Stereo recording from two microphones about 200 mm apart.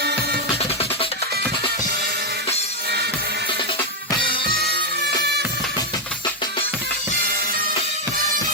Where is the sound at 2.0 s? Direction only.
50° right (ahead or behind).